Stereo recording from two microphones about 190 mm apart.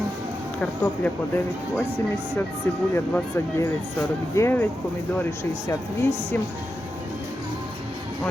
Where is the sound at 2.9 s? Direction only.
15° left (ahead or behind).